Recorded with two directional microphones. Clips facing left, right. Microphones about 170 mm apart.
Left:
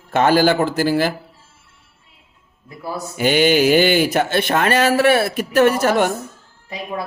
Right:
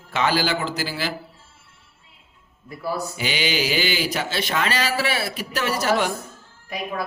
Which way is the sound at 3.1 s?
50° left (ahead or behind).